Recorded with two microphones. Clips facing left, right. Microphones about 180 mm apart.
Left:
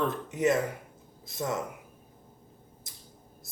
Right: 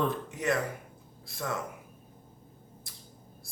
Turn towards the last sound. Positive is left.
turn(degrees=20)  # may be behind; listen again after turning